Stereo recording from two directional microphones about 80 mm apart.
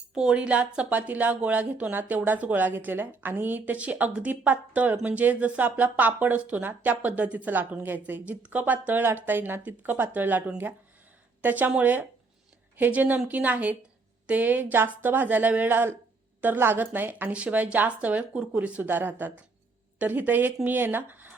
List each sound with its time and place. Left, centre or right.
0.1 s speech: centre
11.4 s a woman's voice: right
18.8 s speech: right